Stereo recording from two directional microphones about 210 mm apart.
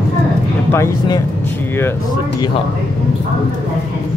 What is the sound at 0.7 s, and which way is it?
Speech, 15° left (ahead or behind).